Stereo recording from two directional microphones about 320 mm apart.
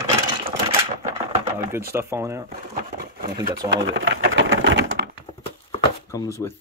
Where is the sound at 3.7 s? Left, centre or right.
Right.